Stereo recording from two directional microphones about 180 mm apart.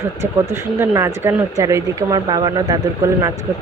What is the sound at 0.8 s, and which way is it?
Speech, 15° right (ahead or behind).